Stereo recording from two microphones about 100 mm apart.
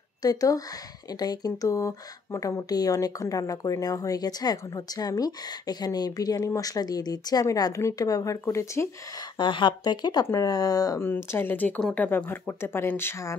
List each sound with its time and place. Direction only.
0.2 s speech: 40° left (ahead or behind)
9.2 s speech: 55° left (ahead or behind)
10.2 s speech: 35° left (ahead or behind)
11.0 s speech: 25° left (ahead or behind)